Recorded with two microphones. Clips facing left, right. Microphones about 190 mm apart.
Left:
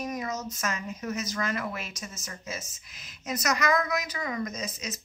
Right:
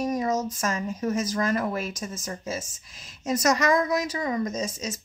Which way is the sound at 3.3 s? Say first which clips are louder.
Right 5 dB; 30° right (ahead or behind).